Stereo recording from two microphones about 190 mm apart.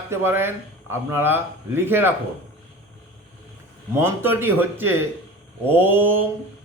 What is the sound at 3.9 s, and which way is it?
A man's voice, 10° right (ahead or behind).